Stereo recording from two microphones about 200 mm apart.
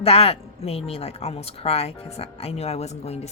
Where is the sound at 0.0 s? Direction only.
30° left (ahead or behind).